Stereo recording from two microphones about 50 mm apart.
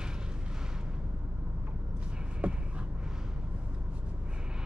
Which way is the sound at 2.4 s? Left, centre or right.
Right.